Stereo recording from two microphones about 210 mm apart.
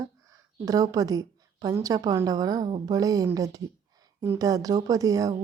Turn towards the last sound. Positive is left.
turn(degrees=-15)  # may be behind; listen again after turning